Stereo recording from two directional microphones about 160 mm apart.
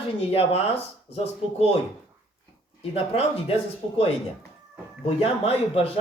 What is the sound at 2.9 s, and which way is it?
Speech, 40° left (ahead or behind).